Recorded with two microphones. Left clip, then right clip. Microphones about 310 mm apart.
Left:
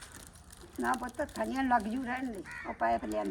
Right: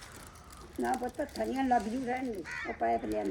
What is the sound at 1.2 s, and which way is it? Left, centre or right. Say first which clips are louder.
Speech: even; left.